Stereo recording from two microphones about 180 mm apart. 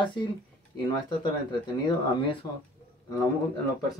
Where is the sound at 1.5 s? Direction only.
25° left (ahead or behind).